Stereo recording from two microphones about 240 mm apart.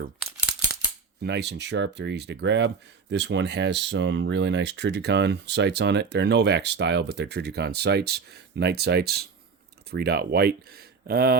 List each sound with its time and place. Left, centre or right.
1.2 s speech: right